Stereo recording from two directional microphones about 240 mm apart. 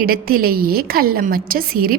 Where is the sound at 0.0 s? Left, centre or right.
Right.